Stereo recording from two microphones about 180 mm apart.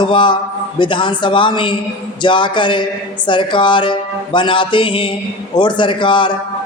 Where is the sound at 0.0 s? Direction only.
25° left (ahead or behind).